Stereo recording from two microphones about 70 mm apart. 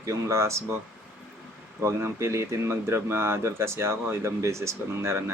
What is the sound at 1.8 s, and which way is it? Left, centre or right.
Speech, right.